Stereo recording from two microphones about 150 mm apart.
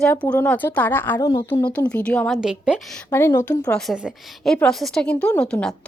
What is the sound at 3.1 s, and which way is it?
Speech, 15° left (ahead or behind).